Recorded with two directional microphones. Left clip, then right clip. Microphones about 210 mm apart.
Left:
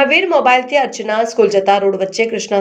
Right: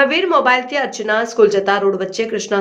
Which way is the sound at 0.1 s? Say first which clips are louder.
Left 3 dB; centre (ahead or behind).